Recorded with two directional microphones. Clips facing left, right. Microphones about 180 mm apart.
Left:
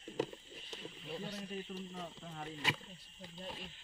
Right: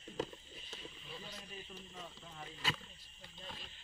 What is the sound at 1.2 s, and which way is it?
Speech, 65° left (ahead or behind).